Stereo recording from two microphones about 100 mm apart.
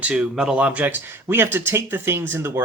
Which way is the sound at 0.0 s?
10° right (ahead or behind).